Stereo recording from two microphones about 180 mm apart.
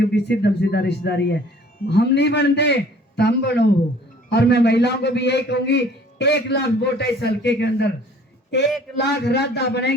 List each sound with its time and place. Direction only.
0.0 s a man's voice: 65° left (ahead or behind)
9.0 s a man's voice: 70° left (ahead or behind)